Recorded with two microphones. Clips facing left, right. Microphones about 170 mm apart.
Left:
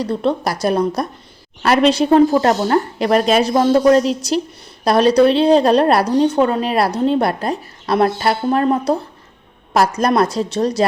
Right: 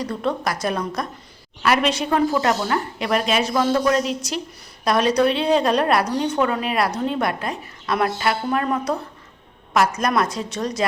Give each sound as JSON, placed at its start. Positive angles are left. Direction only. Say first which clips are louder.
{"t": 0.0, "sound": "speech", "louder": "left 5 dB", "side_deg": 30}